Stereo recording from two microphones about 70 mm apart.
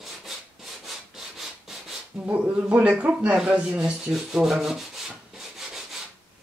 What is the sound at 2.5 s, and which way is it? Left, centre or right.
Rub, centre.